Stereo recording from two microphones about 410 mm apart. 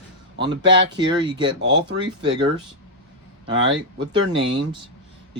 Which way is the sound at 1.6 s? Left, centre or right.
Right.